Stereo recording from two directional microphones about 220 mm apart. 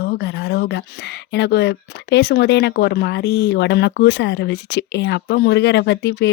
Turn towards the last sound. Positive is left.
turn(degrees=50)  # may be behind; listen again after turning